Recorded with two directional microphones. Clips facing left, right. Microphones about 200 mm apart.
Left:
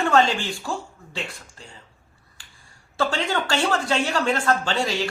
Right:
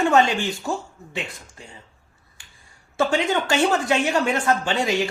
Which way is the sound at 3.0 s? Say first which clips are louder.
Right 3 dB; 20° right (ahead or behind).